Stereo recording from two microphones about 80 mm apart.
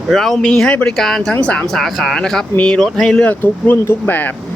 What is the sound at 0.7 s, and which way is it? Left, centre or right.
Speech, centre.